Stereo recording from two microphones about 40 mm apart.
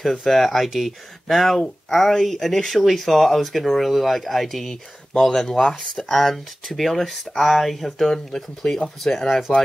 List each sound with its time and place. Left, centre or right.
0.0 s speech: centre
6.1 s speech: centre